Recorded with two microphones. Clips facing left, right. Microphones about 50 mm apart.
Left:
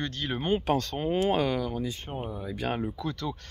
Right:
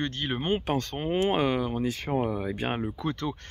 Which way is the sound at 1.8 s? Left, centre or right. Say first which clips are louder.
Right 7 dB; right.